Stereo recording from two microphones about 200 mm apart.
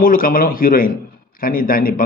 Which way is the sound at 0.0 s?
45° left (ahead or behind).